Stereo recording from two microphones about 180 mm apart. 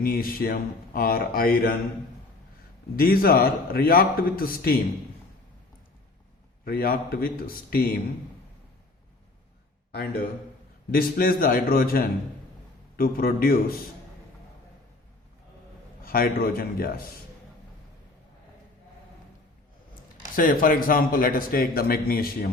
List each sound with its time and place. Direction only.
0.0 s speech: 55° left (ahead or behind)
2.9 s a man's voice: 55° left (ahead or behind)
6.7 s a man's voice: 55° left (ahead or behind)
9.9 s a man's voice: 60° left (ahead or behind)
16.0 s a man's voice: 55° left (ahead or behind)
20.3 s speech: 50° left (ahead or behind)